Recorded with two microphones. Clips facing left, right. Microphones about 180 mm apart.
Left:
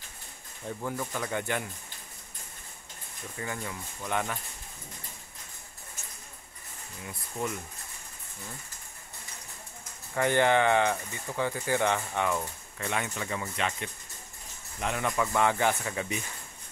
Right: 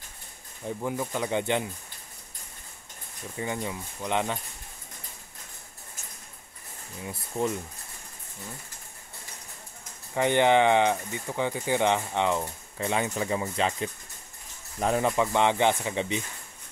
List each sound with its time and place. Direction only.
0.7 s speech: 15° right (ahead or behind)
3.3 s speech: 20° right (ahead or behind)
7.1 s speech: 25° right (ahead or behind)
10.1 s speech: 20° right (ahead or behind)